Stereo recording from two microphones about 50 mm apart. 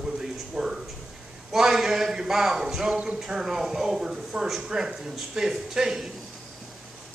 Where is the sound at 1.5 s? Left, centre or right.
Centre.